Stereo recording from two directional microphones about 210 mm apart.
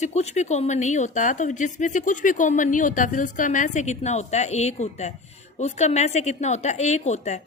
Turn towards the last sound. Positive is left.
turn(degrees=35)  # may be behind; listen again after turning